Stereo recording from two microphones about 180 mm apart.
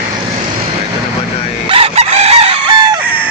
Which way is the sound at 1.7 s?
35° right (ahead or behind).